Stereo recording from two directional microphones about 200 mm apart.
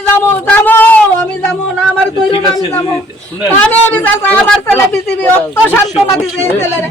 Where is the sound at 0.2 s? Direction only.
10° left (ahead or behind).